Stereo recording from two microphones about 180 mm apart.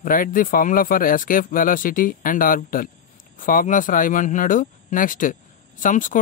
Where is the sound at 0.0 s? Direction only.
50° left (ahead or behind).